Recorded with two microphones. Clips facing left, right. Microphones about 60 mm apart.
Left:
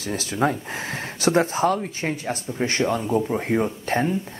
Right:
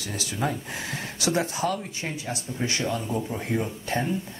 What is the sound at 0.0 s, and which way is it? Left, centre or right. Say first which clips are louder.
Speech: left 6 dB; left.